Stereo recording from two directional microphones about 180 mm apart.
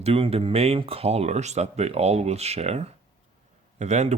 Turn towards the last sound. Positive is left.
turn(degrees=-40)  # may be behind; listen again after turning